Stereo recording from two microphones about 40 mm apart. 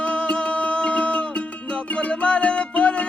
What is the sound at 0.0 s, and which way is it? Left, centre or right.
Music, left.